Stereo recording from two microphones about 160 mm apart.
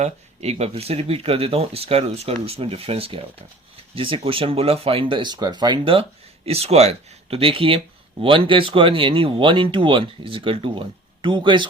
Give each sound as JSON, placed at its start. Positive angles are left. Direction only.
{"t": 0.0, "sound": "speech", "side_deg": -40}